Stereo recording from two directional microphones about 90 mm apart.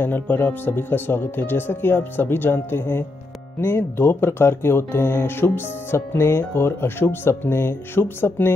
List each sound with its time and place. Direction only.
0.0 s speech: 25° left (ahead or behind)